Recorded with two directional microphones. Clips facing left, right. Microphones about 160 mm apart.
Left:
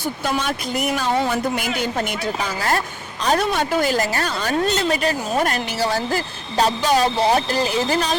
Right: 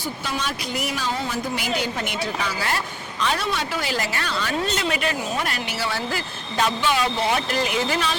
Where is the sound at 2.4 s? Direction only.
45° left (ahead or behind).